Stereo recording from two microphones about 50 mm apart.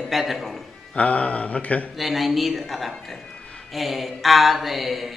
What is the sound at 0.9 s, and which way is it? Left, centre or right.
Speech, left.